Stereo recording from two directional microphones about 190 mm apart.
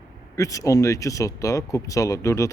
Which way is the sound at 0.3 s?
15° left (ahead or behind).